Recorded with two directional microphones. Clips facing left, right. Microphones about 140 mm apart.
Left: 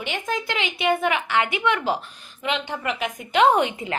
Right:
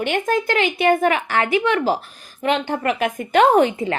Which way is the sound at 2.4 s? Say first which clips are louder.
Right 6 dB; 50° right (ahead or behind).